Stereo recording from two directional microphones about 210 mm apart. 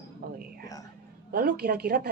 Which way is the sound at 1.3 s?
50° right (ahead or behind).